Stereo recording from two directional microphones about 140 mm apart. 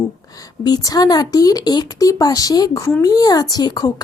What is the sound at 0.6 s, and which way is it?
Speech, 25° left (ahead or behind).